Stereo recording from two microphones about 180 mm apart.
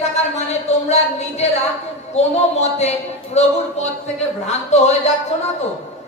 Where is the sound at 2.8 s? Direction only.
40° left (ahead or behind).